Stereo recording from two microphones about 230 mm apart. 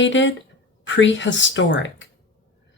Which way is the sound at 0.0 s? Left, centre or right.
Left.